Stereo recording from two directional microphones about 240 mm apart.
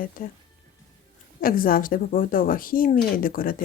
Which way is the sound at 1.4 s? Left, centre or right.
Left.